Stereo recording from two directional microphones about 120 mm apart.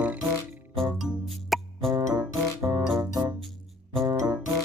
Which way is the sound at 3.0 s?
35° right (ahead or behind).